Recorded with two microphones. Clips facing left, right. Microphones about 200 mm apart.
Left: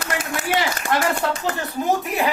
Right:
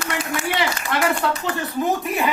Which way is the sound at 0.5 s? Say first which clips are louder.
Left 4 dB; 45° left (ahead or behind).